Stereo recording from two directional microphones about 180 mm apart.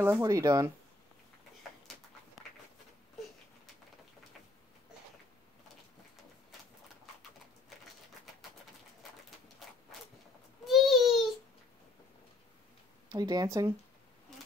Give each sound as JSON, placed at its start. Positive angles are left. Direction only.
{"t": 0.0, "sound": "speech", "side_deg": -15}
{"t": 10.6, "sound": "babbling", "side_deg": 0}
{"t": 13.1, "sound": "speech", "side_deg": -20}